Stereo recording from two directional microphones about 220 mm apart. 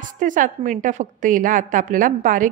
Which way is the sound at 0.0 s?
35° right (ahead or behind).